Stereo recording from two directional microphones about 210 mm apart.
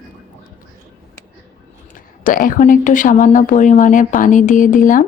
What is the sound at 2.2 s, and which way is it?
A woman's voice, 40° left (ahead or behind).